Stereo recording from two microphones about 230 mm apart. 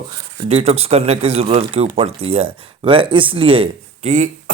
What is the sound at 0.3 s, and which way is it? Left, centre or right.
Speech, right.